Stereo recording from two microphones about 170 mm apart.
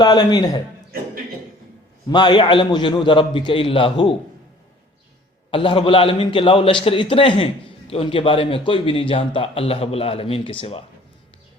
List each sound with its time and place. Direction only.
0.0 s a man's voice: 25° left (ahead or behind)
2.0 s a man's voice: 25° left (ahead or behind)
5.5 s a man's voice: 30° left (ahead or behind)